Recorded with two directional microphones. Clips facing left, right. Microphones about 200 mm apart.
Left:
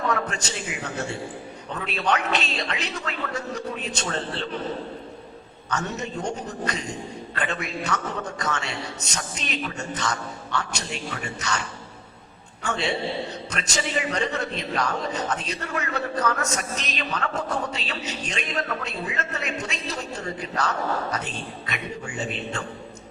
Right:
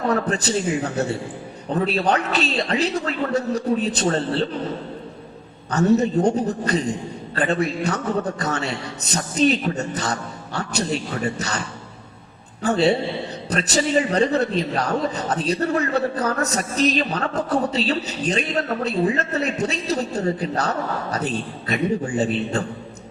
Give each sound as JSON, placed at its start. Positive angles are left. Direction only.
{"t": 0.1, "sound": "a man's voice", "side_deg": -35}
{"t": 5.7, "sound": "a man's voice", "side_deg": -35}
{"t": 12.6, "sound": "a man's voice", "side_deg": -35}